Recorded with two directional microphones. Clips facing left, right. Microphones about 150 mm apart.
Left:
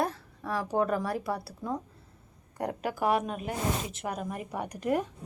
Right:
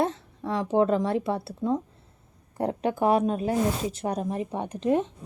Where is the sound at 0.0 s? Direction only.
25° right (ahead or behind).